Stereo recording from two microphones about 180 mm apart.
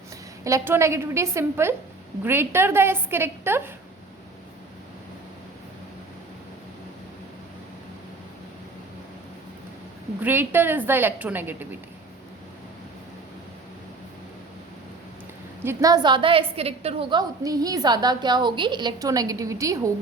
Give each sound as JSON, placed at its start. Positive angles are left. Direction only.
{"t": 0.4, "sound": "a woman's voice", "side_deg": -15}
{"t": 10.2, "sound": "a woman's voice", "side_deg": -10}
{"t": 15.6, "sound": "a woman's voice", "side_deg": -20}